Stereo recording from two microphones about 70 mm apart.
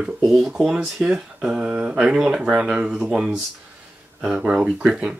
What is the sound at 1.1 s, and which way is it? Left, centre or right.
Speech, centre.